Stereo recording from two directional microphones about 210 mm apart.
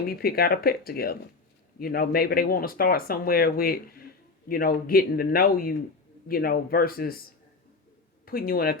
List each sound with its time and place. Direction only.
0.1 s speech: 45° left (ahead or behind)
8.2 s speech: 45° left (ahead or behind)